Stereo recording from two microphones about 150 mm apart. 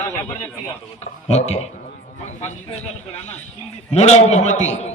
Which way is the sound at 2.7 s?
45° left (ahead or behind).